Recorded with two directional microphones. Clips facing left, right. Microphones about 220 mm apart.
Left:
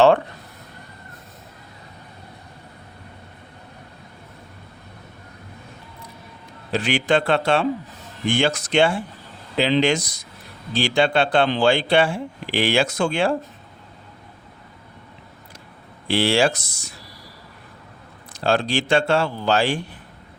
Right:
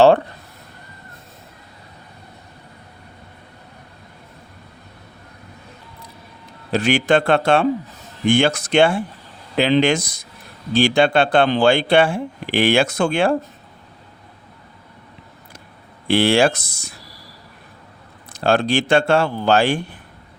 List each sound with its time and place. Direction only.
6.7 s speech: 45° right (ahead or behind)
16.0 s speech: 55° right (ahead or behind)
18.3 s speech: 55° right (ahead or behind)